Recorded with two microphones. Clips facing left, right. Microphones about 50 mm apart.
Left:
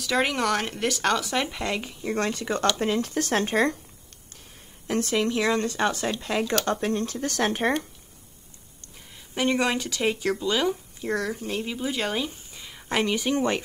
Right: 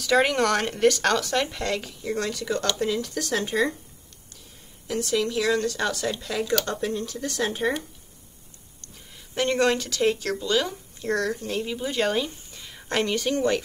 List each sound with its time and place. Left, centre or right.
0.0 s speech: centre; by 3.7 s left
4.8 s speech: left
8.8 s speech: centre